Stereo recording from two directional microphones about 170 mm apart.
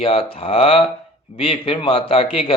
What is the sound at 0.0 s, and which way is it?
Speech, 35° left (ahead or behind).